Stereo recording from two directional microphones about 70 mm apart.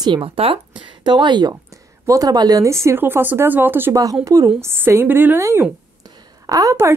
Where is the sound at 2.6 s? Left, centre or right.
Right.